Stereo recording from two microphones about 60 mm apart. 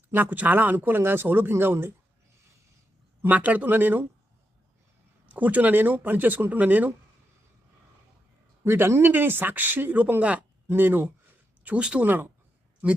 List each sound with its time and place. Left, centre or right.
0.1 s speech: right
3.2 s speech: right
5.3 s speech: right
8.6 s speech: right
11.6 s speech: right